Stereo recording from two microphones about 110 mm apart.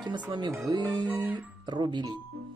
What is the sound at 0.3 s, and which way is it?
Speech, 45° right (ahead or behind).